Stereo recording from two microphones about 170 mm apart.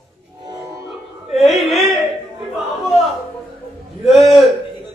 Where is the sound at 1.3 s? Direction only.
Centre (ahead or behind).